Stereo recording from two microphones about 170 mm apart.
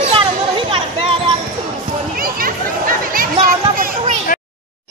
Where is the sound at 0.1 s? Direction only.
30° right (ahead or behind).